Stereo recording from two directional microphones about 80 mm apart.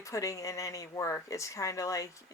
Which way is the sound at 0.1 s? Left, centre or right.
Left.